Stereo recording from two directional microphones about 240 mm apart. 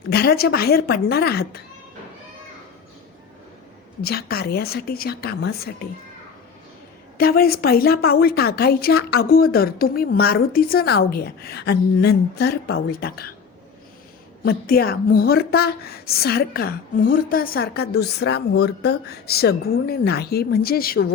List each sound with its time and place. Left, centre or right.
0.1 s a woman's voice: left
4.0 s a woman's voice: left
7.2 s a woman's voice: left
14.4 s a woman's voice: left